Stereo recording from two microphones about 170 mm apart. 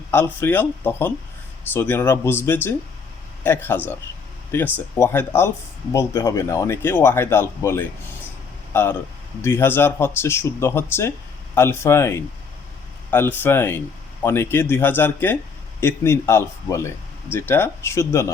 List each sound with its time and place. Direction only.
0.1 s speech: 15° left (ahead or behind)